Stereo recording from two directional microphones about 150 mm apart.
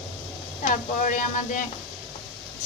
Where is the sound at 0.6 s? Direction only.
55° left (ahead or behind).